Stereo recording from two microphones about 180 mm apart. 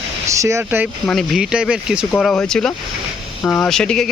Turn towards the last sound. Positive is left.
turn(degrees=5)  # may be behind; listen again after turning